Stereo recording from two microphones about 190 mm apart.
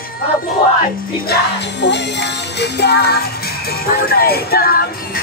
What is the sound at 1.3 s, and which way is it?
Music, 65° left (ahead or behind).